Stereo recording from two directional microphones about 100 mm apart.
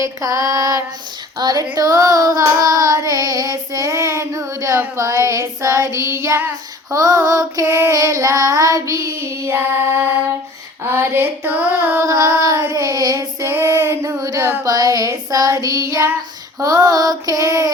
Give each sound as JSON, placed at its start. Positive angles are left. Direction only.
{"t": 0.0, "sound": "child singing", "side_deg": -35}
{"t": 12.0, "sound": "child singing", "side_deg": -30}